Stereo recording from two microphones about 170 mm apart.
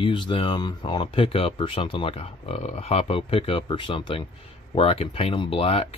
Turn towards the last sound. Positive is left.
turn(degrees=35)  # may be behind; listen again after turning